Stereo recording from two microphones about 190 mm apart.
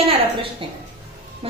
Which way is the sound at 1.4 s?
30° right (ahead or behind).